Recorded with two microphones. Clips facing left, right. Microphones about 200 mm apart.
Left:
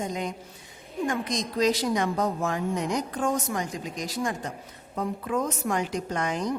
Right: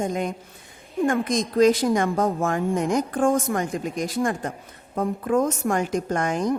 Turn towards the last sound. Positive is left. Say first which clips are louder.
# right 5 dB
turn(degrees=-50)  # may be behind; listen again after turning